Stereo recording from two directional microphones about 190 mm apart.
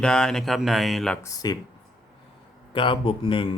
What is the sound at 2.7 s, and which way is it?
Speech, 25° left (ahead or behind).